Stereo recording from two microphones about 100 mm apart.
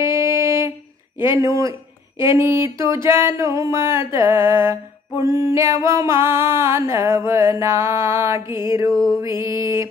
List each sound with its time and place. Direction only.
0.0 s a sound: 25° right (ahead or behind)
2.1 s music: 25° right (ahead or behind)
8.9 s music: 5° left (ahead or behind)
9.4 s music: 25° right (ahead or behind)